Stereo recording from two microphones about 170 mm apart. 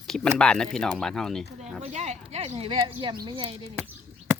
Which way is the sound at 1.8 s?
40° right (ahead or behind).